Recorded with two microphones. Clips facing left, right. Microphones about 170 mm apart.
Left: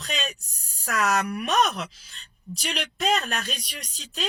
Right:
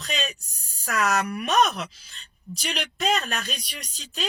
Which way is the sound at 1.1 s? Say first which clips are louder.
Even; 45° left (ahead or behind).